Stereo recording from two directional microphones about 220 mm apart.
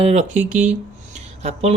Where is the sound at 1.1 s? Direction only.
30° right (ahead or behind).